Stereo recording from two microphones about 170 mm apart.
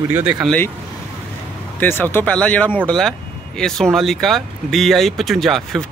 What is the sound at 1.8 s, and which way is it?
Speech, 10° left (ahead or behind).